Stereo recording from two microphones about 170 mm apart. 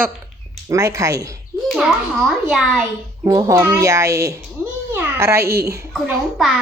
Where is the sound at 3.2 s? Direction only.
20° right (ahead or behind).